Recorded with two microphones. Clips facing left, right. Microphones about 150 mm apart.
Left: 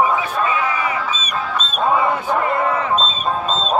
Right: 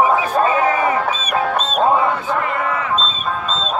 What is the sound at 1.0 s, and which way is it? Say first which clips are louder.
Music: right 5 dB; 60° right (ahead or behind).